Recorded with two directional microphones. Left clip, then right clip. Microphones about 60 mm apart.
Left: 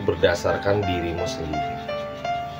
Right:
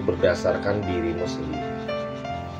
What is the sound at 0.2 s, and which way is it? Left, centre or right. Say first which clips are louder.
Speech: even; left.